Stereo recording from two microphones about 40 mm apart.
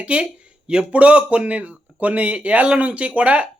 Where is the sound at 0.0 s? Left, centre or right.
Right.